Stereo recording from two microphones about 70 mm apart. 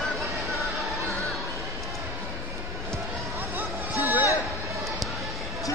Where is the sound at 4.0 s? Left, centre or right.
Right.